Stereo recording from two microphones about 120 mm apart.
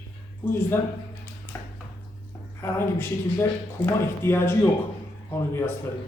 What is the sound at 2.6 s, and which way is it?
Speech, 20° left (ahead or behind).